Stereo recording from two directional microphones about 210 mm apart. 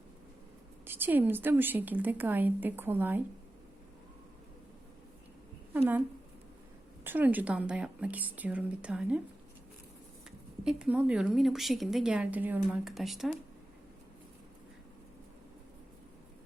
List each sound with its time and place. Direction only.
0.9 s a woman's voice: 10° right (ahead or behind)
5.7 s a woman's voice: 10° right (ahead or behind)
7.0 s a woman's voice: 10° right (ahead or behind)
10.6 s speech: 5° right (ahead or behind)